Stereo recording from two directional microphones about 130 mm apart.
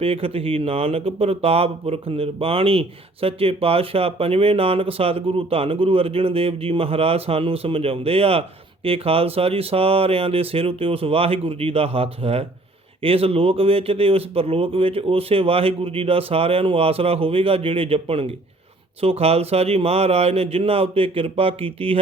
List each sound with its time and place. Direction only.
0.0 s speech: 45° right (ahead or behind)